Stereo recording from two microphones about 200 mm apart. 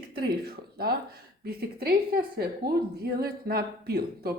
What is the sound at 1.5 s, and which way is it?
Speech, 50° right (ahead or behind).